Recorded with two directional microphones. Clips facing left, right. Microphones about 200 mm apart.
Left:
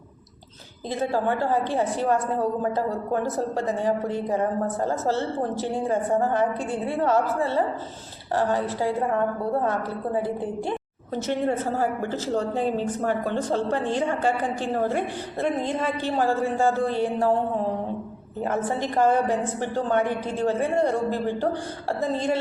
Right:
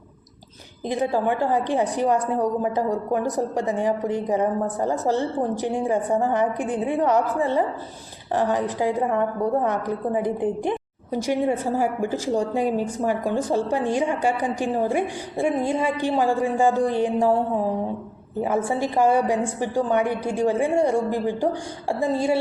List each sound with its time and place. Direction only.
0.9 s a woman's voice: 15° right (ahead or behind)
18.4 s a woman's voice: 10° right (ahead or behind)